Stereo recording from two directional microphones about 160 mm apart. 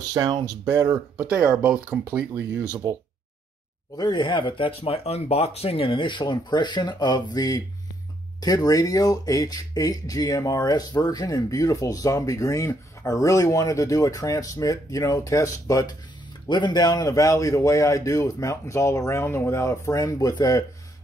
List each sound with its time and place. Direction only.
0.1 s speech: 25° right (ahead or behind)
0.7 s speech: 15° right (ahead or behind)
3.9 s speech: 25° left (ahead or behind)